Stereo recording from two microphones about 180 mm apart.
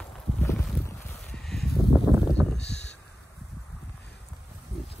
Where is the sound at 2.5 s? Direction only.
70° left (ahead or behind).